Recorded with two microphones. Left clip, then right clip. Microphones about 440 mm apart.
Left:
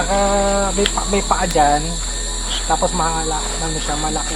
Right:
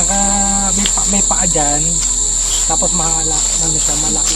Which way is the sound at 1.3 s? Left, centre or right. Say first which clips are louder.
Left 5 dB; right.